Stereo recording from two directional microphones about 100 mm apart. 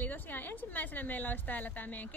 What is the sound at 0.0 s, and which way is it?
A woman's voice, 20° left (ahead or behind).